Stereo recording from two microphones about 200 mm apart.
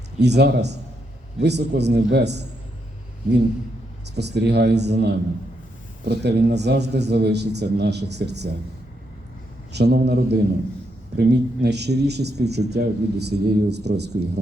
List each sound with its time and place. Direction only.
0.2 s speech: 55° right (ahead or behind)
4.1 s speech: 55° right (ahead or behind)
9.7 s speech: 55° right (ahead or behind)